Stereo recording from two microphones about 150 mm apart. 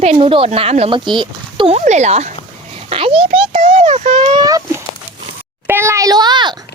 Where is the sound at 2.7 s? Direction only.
40° right (ahead or behind).